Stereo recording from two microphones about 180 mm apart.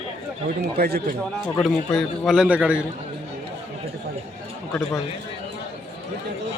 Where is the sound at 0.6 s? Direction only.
60° right (ahead or behind).